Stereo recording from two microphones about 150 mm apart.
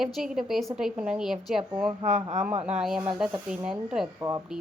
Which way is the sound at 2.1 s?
50° right (ahead or behind).